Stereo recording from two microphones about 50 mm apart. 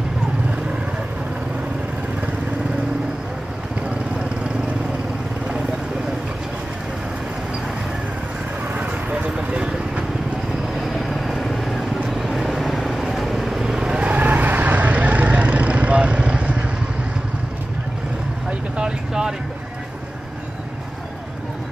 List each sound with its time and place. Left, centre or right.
8.7 s vehicle: right
10.8 s vehicle: centre
14.0 s vehicle: right
18.5 s a sound: centre